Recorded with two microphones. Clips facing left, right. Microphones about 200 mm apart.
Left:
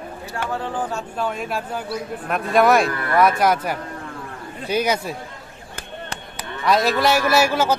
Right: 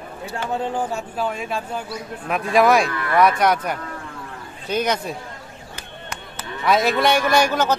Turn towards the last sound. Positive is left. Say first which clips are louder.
# even
turn(degrees=10)  # may be behind; listen again after turning